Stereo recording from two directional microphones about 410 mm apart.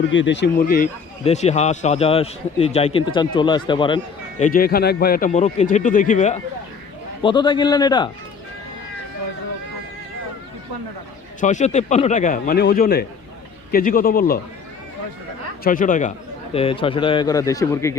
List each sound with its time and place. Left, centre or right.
0.1 s speech: left; by 8.1 s centre
11.3 s a man's voice: centre
15.6 s speech: centre